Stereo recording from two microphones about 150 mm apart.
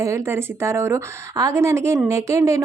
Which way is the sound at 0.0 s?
20° right (ahead or behind).